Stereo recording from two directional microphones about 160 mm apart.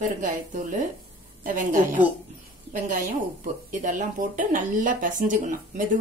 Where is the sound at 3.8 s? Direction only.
55° right (ahead or behind).